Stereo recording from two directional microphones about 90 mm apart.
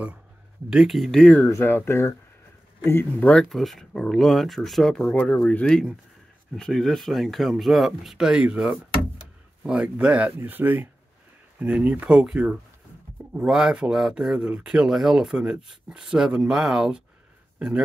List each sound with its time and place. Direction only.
0.7 s speech: 5° right (ahead or behind)
1.4 s speech: 25° left (ahead or behind)
3.3 s speech: 5° left (ahead or behind)
5.1 s speech: 15° left (ahead or behind); by 17.8 s 10° right (ahead or behind)